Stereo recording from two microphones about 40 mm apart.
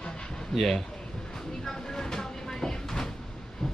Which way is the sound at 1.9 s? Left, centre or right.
Centre.